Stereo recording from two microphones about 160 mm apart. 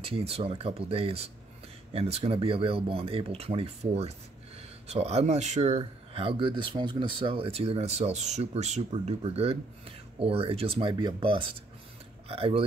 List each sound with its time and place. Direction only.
0.0 s speech: 40° right (ahead or behind)